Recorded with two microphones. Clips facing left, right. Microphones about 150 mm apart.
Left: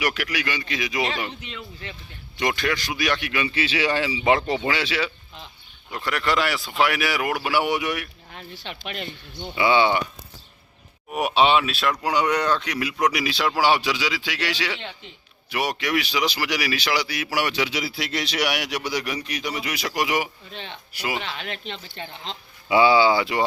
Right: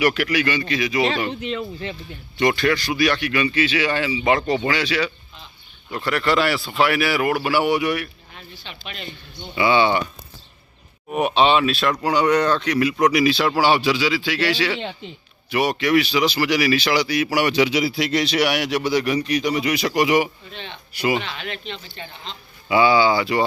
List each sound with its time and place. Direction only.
0.0 s speech: 10° left (ahead or behind)
1.3 s speech: 50° right (ahead or behind)
2.4 s speech: 10° left (ahead or behind)
3.6 s speech: 30° left (ahead or behind)
4.4 s speech: 15° left (ahead or behind)
4.7 s speech: 25° left (ahead or behind)
5.9 s speech: 15° left (ahead or behind)
8.6 s speech: 55° left (ahead or behind)
9.6 s speech: 15° left (ahead or behind)
11.1 s speech: 10° left (ahead or behind)
15.4 s speech: 10° left (ahead or behind)
21.3 s speech: 40° left (ahead or behind)
22.7 s speech: 25° left (ahead or behind)